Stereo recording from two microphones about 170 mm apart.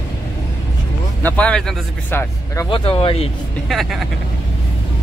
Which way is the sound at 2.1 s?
15° left (ahead or behind).